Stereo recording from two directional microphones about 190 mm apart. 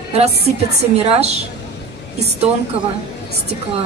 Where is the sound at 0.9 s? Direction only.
35° right (ahead or behind).